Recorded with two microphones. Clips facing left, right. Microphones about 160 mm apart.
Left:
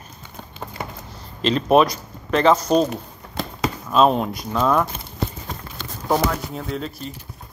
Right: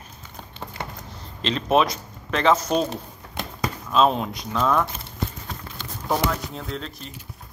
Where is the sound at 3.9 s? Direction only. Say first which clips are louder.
Left 3 dB; 5° left (ahead or behind).